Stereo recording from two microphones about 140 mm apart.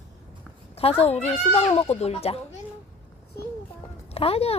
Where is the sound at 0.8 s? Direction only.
45° left (ahead or behind).